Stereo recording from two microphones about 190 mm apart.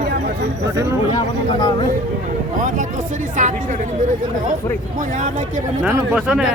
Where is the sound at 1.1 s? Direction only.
25° left (ahead or behind).